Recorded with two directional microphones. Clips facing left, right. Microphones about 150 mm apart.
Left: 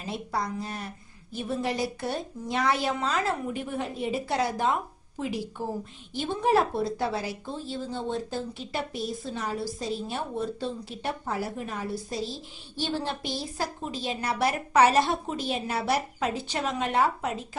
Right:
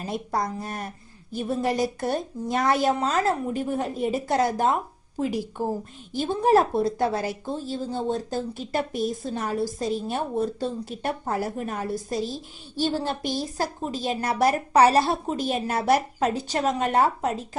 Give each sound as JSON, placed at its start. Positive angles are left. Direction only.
{"t": 0.0, "sound": "a woman's voice", "side_deg": -45}